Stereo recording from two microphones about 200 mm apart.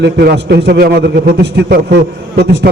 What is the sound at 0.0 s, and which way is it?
A man's voice, 55° right (ahead or behind).